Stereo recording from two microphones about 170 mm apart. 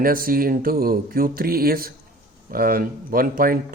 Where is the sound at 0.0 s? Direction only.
55° right (ahead or behind).